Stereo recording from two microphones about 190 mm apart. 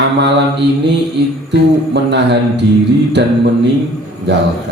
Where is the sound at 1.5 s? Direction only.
65° right (ahead or behind).